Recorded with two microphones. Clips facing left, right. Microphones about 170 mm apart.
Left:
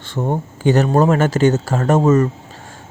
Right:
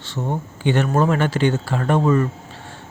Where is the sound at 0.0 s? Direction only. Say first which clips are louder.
Left 4 dB; 50° left (ahead or behind).